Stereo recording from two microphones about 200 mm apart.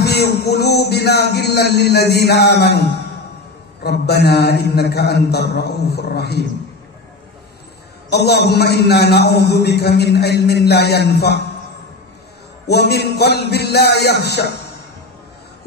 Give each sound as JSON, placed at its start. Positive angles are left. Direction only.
{"t": 0.0, "sound": "music", "side_deg": 55}
{"t": 3.8, "sound": "a man's voice", "side_deg": 55}
{"t": 8.1, "sound": "a man's voice", "side_deg": 55}
{"t": 12.6, "sound": "a man's voice", "side_deg": 55}